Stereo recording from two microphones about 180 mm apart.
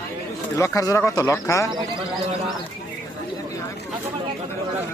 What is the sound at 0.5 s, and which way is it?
A man's voice, 15° left (ahead or behind).